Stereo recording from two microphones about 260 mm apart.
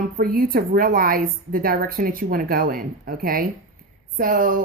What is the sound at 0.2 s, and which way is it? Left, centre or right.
A woman's voice, right.